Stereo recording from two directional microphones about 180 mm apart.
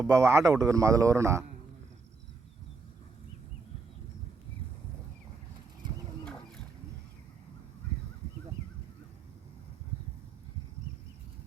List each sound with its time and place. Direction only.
0.1 s speech: 15° right (ahead or behind)